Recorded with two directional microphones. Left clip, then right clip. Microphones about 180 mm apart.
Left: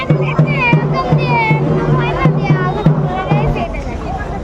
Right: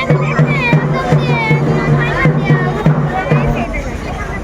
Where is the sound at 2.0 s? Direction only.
20° left (ahead or behind).